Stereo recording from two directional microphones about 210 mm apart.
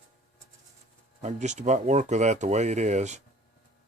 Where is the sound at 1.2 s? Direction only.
35° right (ahead or behind).